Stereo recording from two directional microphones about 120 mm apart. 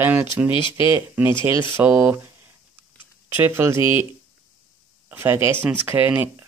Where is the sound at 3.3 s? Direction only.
20° right (ahead or behind).